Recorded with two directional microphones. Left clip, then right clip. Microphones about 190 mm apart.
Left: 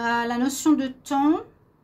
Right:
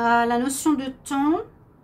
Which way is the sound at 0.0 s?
50° left (ahead or behind).